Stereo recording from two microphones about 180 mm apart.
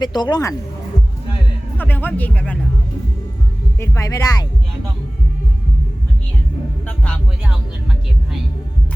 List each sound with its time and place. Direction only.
0.0 s speech: 25° left (ahead or behind)
1.8 s speech: 10° left (ahead or behind)
3.8 s speech: 15° left (ahead or behind)
6.8 s music: 5° left (ahead or behind)